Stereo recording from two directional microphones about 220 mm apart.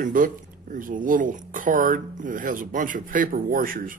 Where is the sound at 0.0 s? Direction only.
40° right (ahead or behind).